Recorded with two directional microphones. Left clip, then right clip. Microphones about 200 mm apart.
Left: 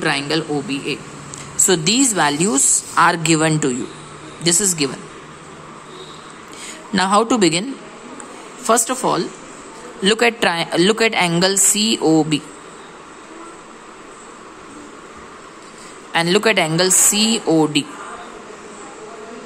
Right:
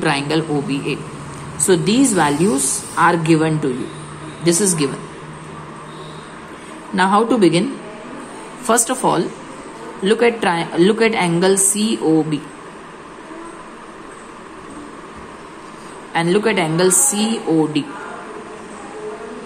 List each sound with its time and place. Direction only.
0.0 s a man's voice: 15° left (ahead or behind)
1.7 s a woman's voice: 30° left (ahead or behind)
7.0 s speech: 30° left (ahead or behind)
8.6 s a man's voice: 15° left (ahead or behind)
10.0 s a woman's voice: 30° left (ahead or behind)
16.1 s a woman's voice: 30° left (ahead or behind)